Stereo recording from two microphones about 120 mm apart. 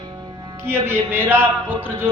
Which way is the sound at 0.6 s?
20° right (ahead or behind).